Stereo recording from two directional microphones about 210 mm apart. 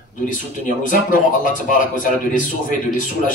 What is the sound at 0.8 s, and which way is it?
Speech, 40° left (ahead or behind).